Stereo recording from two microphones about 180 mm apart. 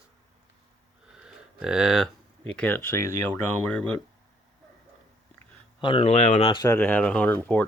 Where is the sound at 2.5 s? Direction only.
10° left (ahead or behind).